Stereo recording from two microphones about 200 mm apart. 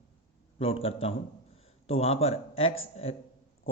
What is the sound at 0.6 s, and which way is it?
A man's voice, 30° left (ahead or behind).